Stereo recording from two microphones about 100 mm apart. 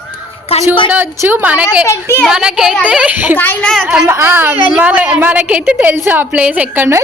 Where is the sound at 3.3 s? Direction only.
20° left (ahead or behind).